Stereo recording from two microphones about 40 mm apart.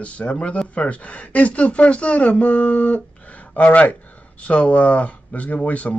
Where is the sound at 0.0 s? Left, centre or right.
Left.